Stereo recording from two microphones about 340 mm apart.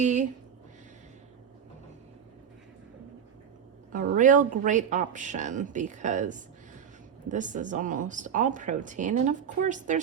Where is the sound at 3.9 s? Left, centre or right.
Right.